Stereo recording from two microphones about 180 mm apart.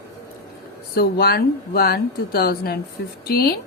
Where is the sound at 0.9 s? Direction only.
60° left (ahead or behind).